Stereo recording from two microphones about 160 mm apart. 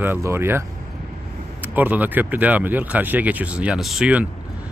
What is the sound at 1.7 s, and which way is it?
Speech, 10° right (ahead or behind).